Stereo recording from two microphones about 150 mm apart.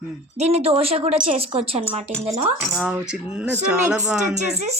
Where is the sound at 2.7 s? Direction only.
5° right (ahead or behind).